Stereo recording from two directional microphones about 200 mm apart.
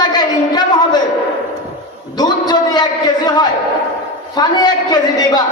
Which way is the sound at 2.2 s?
20° left (ahead or behind).